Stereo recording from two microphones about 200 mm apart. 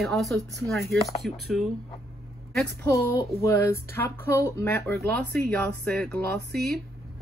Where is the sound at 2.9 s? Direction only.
15° left (ahead or behind).